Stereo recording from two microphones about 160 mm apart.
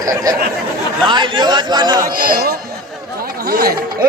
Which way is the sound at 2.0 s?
65° right (ahead or behind).